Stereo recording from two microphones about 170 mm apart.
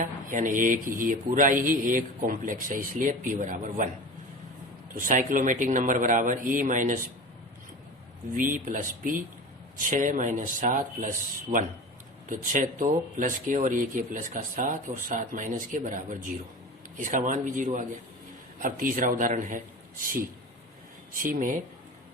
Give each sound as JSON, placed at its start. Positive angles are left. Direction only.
{"t": 0.0, "sound": "speech", "side_deg": -50}
{"t": 5.0, "sound": "speech", "side_deg": -50}
{"t": 8.3, "sound": "speech", "side_deg": -50}
{"t": 12.3, "sound": "speech", "side_deg": -50}
{"t": 21.2, "sound": "speech", "side_deg": -55}